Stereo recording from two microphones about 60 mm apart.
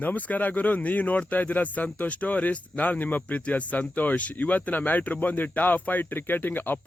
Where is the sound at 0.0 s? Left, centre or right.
Left.